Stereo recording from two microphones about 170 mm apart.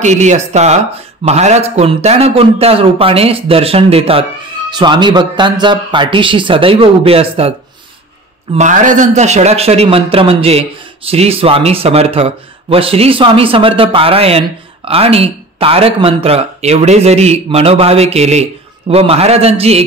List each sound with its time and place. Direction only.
0.0 s speech: 45° right (ahead or behind)
8.5 s speech: 50° right (ahead or behind)